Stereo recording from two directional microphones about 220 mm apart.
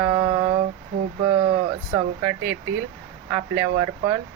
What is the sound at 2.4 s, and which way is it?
Speech, 55° right (ahead or behind).